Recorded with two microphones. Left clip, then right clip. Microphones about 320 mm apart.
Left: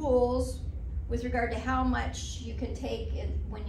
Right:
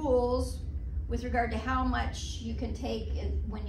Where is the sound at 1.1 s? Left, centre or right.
Centre.